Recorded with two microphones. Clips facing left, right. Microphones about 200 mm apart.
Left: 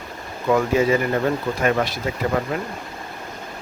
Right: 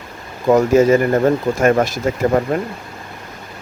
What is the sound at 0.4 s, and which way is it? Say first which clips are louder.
Speech: right 6 dB; 40° right (ahead or behind).